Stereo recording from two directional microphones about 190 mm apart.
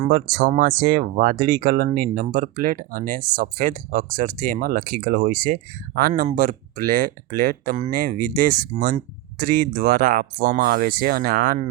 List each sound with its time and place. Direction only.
0.0 s speech: 50° right (ahead or behind)